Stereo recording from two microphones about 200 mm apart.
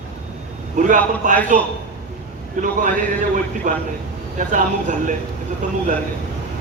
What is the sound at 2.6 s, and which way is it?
A man's voice, 40° right (ahead or behind).